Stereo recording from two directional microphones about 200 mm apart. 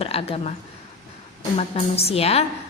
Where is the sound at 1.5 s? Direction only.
30° left (ahead or behind).